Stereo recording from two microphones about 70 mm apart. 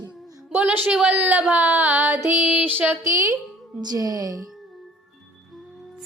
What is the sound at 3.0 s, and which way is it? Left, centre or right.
Speech, right.